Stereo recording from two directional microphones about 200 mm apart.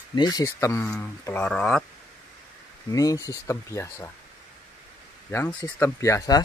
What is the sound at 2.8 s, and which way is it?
Speech, 15° left (ahead or behind).